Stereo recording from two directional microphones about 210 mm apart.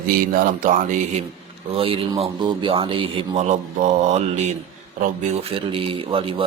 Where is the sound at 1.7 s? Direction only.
25° right (ahead or behind).